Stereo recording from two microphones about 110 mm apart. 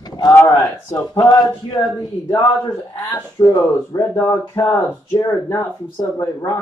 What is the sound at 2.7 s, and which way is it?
Speech, 20° left (ahead or behind).